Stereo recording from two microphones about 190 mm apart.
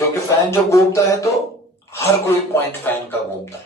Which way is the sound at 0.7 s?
15° left (ahead or behind).